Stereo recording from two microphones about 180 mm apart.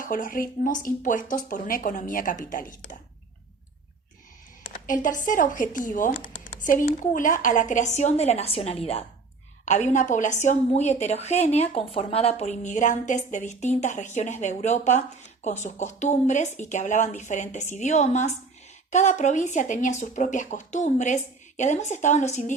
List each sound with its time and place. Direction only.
0.0 s speech: 50° left (ahead or behind)
4.9 s a woman's voice: 45° left (ahead or behind)